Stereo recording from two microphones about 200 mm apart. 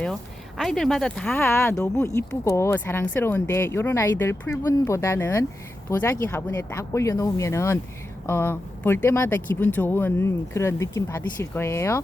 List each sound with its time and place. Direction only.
0.0 s speech: centre (ahead or behind)